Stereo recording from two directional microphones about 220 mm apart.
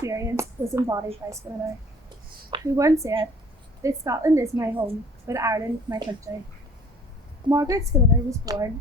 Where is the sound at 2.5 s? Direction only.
15° right (ahead or behind).